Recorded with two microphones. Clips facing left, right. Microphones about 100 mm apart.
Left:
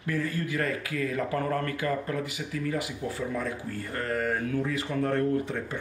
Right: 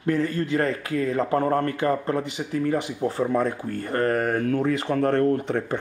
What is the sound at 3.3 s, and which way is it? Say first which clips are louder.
Speech: right 8 dB; 55° right (ahead or behind).